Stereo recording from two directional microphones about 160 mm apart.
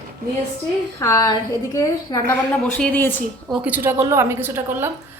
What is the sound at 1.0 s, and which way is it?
A man's voice, 20° left (ahead or behind).